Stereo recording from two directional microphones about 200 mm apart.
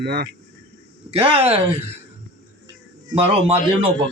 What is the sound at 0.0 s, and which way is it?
Speech, 50° right (ahead or behind).